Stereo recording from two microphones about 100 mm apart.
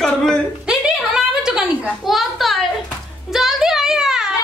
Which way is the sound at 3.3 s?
5° right (ahead or behind).